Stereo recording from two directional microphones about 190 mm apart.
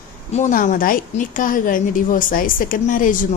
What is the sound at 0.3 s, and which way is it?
A woman's voice, 40° left (ahead or behind).